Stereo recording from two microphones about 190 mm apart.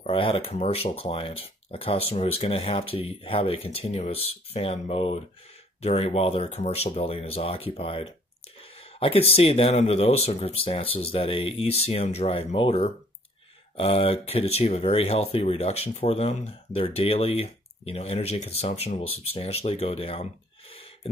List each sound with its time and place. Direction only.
0.0 s speech: 30° left (ahead or behind)